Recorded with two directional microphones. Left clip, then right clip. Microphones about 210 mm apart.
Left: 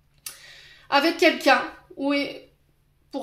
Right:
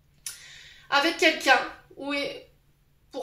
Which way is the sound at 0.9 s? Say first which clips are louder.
Left 3 dB; 40° left (ahead or behind).